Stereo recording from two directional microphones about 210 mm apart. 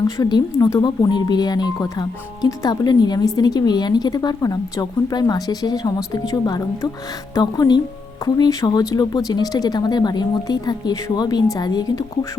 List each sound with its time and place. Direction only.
0.2 s speech: 20° left (ahead or behind)